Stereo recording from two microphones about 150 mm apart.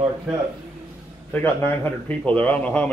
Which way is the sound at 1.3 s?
15° left (ahead or behind).